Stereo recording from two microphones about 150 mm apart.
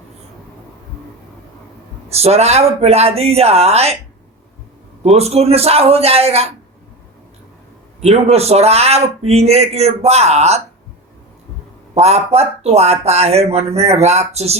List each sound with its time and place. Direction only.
2.0 s speech: 45° right (ahead or behind)
5.0 s speech: 45° right (ahead or behind)
8.0 s speech: 45° right (ahead or behind)
11.9 s speech: 45° right (ahead or behind)